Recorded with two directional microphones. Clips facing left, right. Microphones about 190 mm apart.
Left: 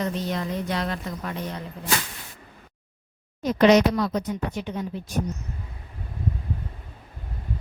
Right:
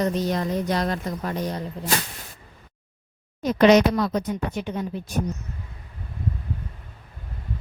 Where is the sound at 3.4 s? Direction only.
60° right (ahead or behind).